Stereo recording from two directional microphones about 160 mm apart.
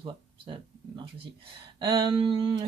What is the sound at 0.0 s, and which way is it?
Speech, 30° right (ahead or behind).